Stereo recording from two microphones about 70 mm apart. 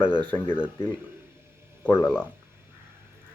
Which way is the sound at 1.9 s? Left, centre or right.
Left.